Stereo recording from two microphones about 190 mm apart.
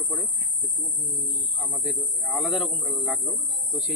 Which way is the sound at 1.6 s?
Centre (ahead or behind).